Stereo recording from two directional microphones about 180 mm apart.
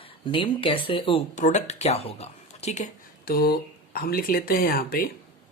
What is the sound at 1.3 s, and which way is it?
Speech, 40° left (ahead or behind).